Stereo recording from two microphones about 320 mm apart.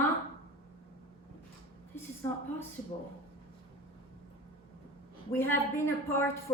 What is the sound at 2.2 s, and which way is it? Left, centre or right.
Speech, centre.